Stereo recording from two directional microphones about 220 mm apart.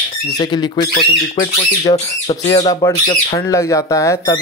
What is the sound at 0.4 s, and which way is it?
Speech, 20° left (ahead or behind).